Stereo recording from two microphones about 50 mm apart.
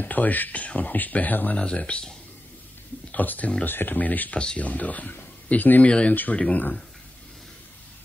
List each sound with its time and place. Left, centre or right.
0.0 s speech: left
1.7 s speech: left
3.1 s speech: left
5.9 s speech: centre
6.1 s speech: left